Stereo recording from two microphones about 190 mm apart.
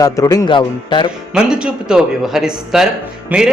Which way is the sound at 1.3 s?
5° right (ahead or behind).